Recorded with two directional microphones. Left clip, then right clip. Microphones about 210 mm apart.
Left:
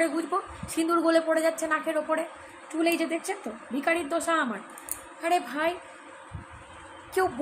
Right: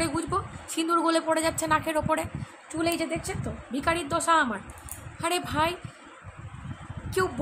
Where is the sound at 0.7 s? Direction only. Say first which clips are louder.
Left 1 dB; 10° right (ahead or behind).